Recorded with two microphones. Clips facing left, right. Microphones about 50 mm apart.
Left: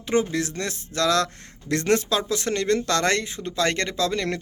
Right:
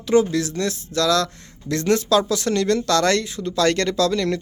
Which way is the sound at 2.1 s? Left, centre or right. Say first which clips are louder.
Right 6 dB; left.